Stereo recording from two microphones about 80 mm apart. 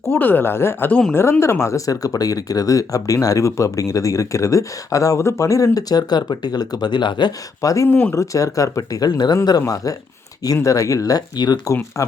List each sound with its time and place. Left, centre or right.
0.1 s speech: left
7.6 s speech: left
7.9 s speech: left
8.1 s speech: left
11.6 s speech: left